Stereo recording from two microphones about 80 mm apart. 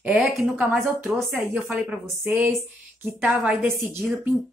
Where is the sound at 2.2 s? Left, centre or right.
Right.